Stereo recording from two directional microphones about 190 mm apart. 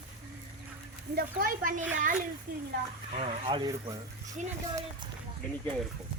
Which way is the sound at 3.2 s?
25° right (ahead or behind).